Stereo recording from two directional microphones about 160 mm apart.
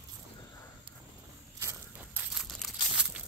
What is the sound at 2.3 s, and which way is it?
Crumpling, 5° right (ahead or behind).